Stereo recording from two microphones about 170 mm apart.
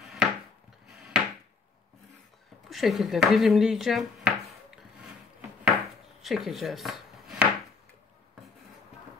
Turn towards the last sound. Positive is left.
turn(degrees=0)  # may be behind; listen again after turning